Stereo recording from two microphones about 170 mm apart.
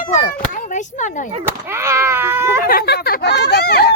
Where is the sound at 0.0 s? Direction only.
50° left (ahead or behind).